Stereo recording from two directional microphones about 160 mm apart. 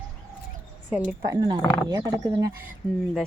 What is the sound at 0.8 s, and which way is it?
Speech, 10° right (ahead or behind).